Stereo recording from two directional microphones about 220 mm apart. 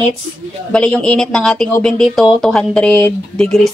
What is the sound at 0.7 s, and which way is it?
Speech, 5° left (ahead or behind).